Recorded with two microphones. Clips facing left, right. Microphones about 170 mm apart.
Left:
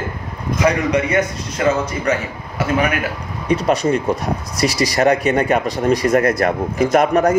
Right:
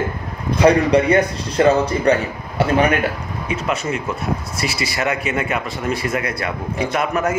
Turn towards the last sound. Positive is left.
turn(degrees=40)  # may be behind; listen again after turning